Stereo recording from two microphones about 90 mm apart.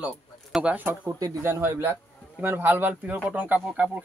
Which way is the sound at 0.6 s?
15° right (ahead or behind).